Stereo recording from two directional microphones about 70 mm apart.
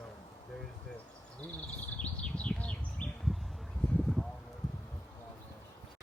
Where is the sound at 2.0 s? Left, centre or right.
Centre.